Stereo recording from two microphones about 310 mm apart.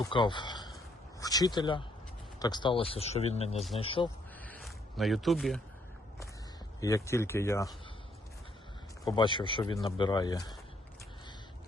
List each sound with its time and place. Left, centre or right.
0.0 s speech: centre
4.4 s a sound: centre
6.7 s speech: centre
9.0 s speech: centre